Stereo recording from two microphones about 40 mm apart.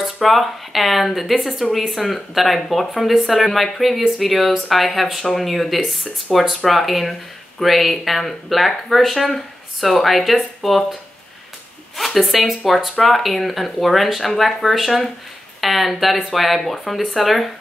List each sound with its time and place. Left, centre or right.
0.2 s speech: centre
12.0 s speech: centre